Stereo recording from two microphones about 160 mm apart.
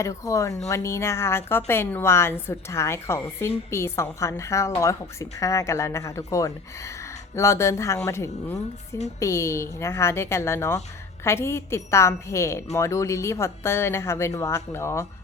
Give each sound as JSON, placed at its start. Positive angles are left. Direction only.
{"t": 0.0, "sound": "a woman's voice", "side_deg": 20}